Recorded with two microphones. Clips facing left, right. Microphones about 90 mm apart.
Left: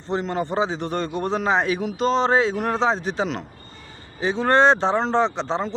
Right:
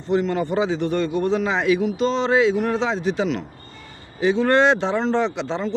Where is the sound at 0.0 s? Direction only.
35° left (ahead or behind).